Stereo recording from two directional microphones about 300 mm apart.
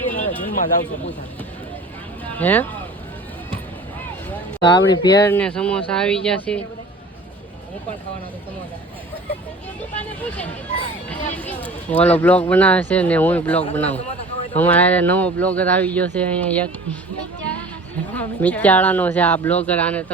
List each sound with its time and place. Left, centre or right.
0.1 s a sound: left
2.2 s speech: centre
4.3 s speech: centre
11.3 s speech: centre
17.4 s music: centre
18.1 s speech: centre